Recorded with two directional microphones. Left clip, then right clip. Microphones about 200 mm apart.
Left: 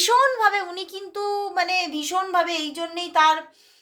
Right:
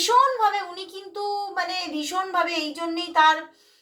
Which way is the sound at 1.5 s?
50° left (ahead or behind).